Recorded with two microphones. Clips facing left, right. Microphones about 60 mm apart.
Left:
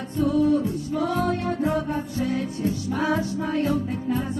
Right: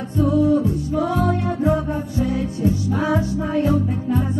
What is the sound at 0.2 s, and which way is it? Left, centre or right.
Music, right.